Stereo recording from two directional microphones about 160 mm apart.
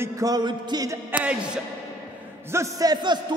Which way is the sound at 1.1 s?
10° right (ahead or behind).